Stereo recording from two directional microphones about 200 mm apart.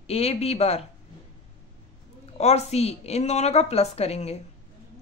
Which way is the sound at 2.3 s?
30° left (ahead or behind).